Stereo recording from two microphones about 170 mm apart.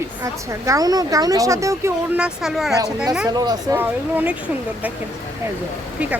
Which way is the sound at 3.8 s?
10° right (ahead or behind).